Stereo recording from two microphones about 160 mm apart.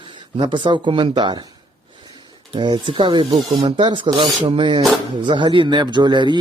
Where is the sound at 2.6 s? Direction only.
30° right (ahead or behind).